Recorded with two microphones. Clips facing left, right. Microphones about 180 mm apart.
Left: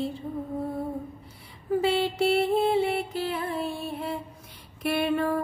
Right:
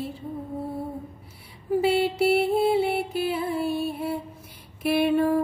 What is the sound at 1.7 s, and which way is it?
Music, 5° right (ahead or behind).